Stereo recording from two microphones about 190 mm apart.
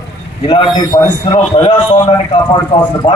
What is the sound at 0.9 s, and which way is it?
Speech, 20° left (ahead or behind).